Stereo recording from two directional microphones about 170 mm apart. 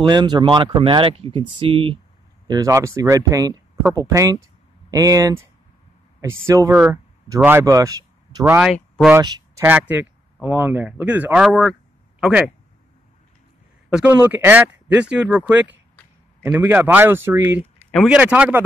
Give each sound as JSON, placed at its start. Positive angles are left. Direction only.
{"t": 0.0, "sound": "speech", "side_deg": -25}
{"t": 2.4, "sound": "speech", "side_deg": -20}
{"t": 13.9, "sound": "speech", "side_deg": -10}